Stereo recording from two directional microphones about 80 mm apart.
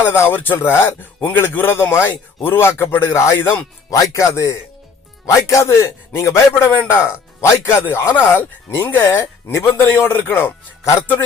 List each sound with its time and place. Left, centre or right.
0.0 s a man's voice: left
3.8 s a man's voice: left